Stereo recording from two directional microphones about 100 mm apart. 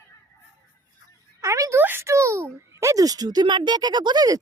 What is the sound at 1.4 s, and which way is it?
A child's voice, 30° right (ahead or behind).